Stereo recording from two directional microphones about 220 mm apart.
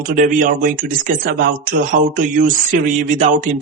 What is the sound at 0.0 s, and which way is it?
Speech, 35° right (ahead or behind).